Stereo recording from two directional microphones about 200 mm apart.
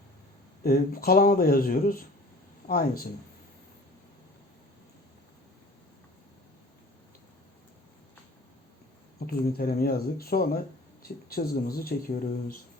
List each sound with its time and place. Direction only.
0.6 s speech: 50° left (ahead or behind)
9.2 s speech: 50° left (ahead or behind)